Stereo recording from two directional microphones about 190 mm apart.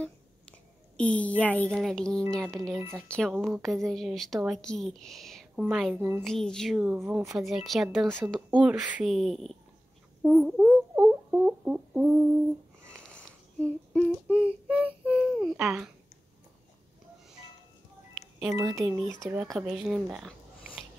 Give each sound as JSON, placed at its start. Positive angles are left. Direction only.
{"t": 0.0, "sound": "a woman's voice", "side_deg": 5}
{"t": 6.8, "sound": "speech", "side_deg": -10}
{"t": 10.2, "sound": "a sound", "side_deg": -5}
{"t": 12.9, "sound": "a sound", "side_deg": 5}
{"t": 15.1, "sound": "speech", "side_deg": 0}
{"t": 18.6, "sound": "speech", "side_deg": -15}
{"t": 19.4, "sound": "speech", "side_deg": 0}